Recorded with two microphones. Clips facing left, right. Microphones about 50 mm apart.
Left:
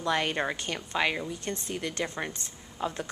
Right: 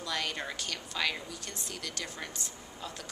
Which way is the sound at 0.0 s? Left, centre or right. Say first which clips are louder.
Left 7 dB; left.